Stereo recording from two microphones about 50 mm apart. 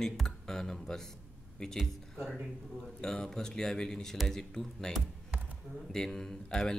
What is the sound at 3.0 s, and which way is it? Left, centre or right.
Speech, centre.